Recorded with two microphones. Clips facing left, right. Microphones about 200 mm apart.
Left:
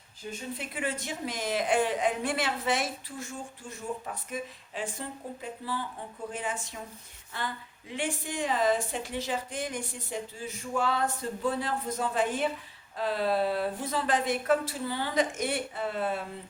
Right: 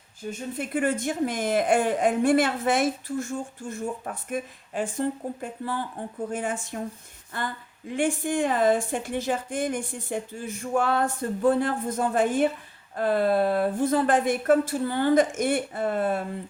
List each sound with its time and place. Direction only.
0.3 s speech: 50° right (ahead or behind)